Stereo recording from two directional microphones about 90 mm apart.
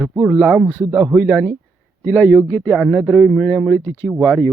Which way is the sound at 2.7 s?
10° right (ahead or behind).